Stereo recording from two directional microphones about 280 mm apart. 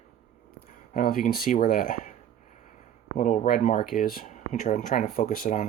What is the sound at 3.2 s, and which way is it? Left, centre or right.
Speech, left.